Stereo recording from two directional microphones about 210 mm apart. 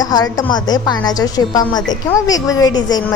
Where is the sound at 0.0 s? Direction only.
20° left (ahead or behind).